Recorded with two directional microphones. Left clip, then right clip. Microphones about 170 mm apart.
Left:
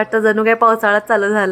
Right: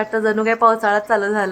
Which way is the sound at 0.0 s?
20° left (ahead or behind).